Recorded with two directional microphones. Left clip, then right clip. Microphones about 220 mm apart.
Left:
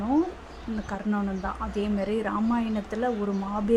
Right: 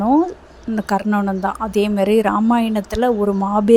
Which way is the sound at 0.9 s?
35° right (ahead or behind).